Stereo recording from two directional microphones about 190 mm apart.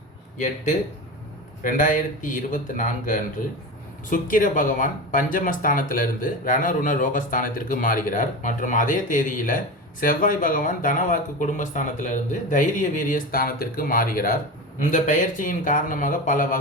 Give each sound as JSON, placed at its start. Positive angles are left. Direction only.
{"t": 1.6, "sound": "speech", "side_deg": 45}